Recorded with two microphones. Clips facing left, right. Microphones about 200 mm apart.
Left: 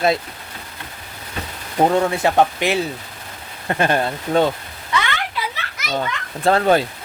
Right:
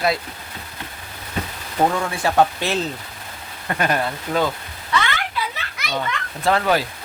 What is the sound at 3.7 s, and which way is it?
Speech, 30° left (ahead or behind).